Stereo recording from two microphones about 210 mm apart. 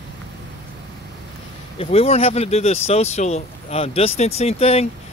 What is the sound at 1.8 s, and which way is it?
Speech, 30° left (ahead or behind).